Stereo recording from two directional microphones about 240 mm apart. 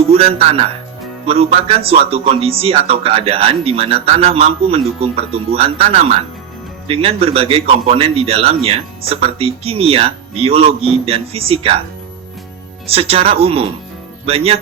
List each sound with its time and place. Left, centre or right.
0.1 s speech: right
12.9 s speech: right